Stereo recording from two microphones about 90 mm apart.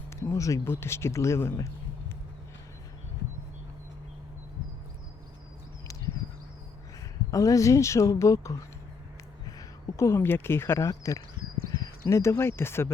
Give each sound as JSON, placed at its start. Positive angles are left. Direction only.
{"t": 0.1, "sound": "speech", "side_deg": 30}
{"t": 7.3, "sound": "speech", "side_deg": 40}